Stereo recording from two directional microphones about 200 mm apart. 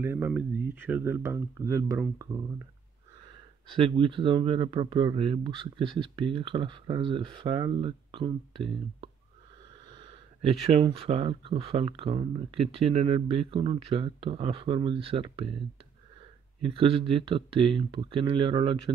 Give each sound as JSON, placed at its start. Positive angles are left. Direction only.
{"t": 0.0, "sound": "speech", "side_deg": -10}
{"t": 16.6, "sound": "speech", "side_deg": -25}